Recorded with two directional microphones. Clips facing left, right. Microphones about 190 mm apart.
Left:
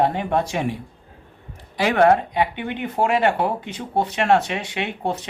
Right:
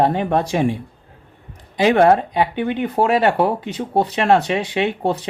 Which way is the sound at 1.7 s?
25° right (ahead or behind).